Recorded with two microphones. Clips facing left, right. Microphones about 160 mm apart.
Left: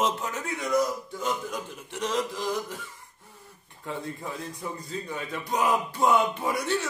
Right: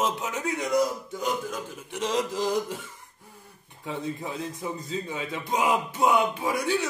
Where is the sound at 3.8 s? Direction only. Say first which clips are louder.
Right 2 dB; 15° right (ahead or behind).